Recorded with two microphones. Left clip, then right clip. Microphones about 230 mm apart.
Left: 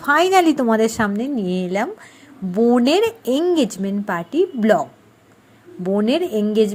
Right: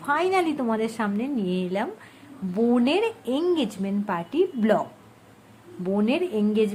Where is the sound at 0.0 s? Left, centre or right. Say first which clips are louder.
Left 8 dB; left.